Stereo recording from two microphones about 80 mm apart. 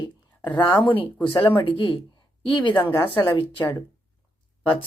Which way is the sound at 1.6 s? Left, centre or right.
Left.